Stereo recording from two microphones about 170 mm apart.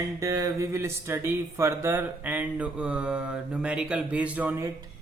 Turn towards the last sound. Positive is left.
turn(degrees=-10)  # may be behind; listen again after turning